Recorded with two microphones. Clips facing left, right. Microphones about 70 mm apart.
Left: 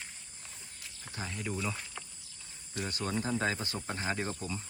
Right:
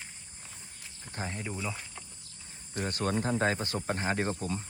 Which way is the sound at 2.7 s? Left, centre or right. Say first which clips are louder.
Right 4 dB; right.